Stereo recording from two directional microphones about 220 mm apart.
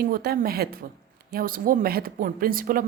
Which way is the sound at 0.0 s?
45° right (ahead or behind).